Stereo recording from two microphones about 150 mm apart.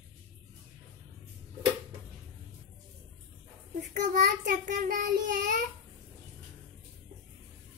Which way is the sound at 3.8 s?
55° right (ahead or behind).